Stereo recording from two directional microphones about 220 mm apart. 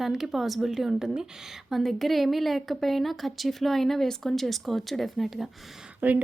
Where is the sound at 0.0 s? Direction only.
Centre (ahead or behind).